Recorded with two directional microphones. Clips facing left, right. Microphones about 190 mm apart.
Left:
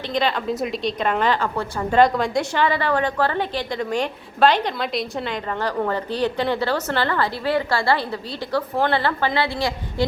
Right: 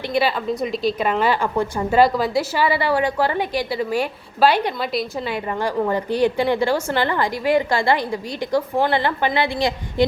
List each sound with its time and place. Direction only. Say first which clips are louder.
0.1 s a woman's voice: right 1 dB; 5° right (ahead or behind)
2.0 s a woman's voice: even; 5° right (ahead or behind)